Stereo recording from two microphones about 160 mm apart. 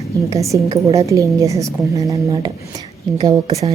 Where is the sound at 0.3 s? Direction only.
20° right (ahead or behind).